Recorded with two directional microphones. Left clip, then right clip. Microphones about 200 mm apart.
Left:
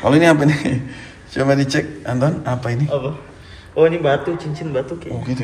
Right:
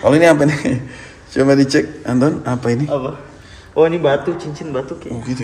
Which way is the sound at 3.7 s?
55° right (ahead or behind).